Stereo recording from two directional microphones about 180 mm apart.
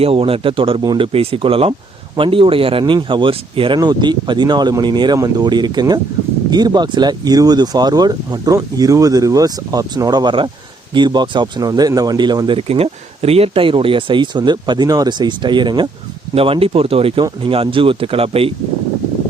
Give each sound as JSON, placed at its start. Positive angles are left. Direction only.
{"t": 0.0, "sound": "speech", "side_deg": -30}